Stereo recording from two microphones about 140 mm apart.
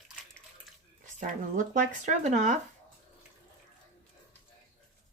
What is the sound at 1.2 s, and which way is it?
Speech, 65° right (ahead or behind).